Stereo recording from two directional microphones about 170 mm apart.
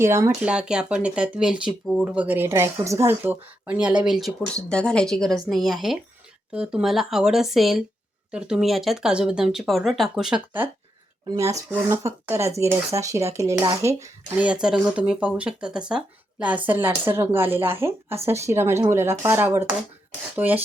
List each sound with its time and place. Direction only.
0.0 s speech: 15° right (ahead or behind)
0.4 s speech: 5° right (ahead or behind)
14.4 s speech: 5° right (ahead or behind)